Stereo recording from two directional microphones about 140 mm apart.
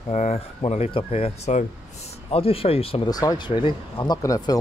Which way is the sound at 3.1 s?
25° left (ahead or behind).